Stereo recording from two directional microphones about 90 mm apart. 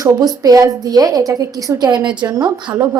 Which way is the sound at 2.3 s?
40° right (ahead or behind).